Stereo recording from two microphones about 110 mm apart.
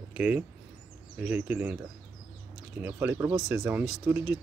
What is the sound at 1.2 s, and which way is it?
Speech, 15° right (ahead or behind).